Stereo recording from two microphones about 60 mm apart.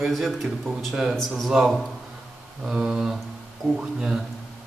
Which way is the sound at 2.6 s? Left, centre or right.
Centre.